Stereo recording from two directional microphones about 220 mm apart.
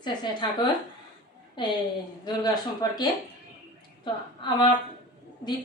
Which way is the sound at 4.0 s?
20° left (ahead or behind).